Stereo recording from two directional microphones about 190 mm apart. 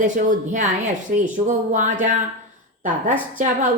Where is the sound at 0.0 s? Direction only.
40° right (ahead or behind).